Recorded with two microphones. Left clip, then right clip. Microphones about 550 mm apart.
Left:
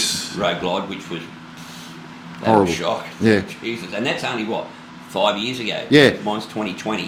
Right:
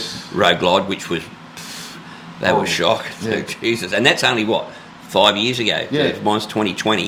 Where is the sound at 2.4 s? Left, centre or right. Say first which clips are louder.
Even; right.